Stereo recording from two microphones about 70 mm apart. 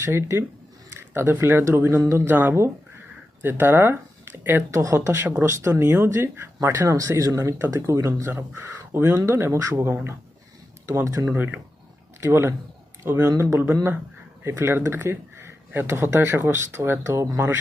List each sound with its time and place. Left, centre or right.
0.0 s speech: right
4.7 s speech: right
5.2 s speech: right
8.3 s speech: right
9.6 s speech: right
9.8 s speech: right
11.0 s speech: right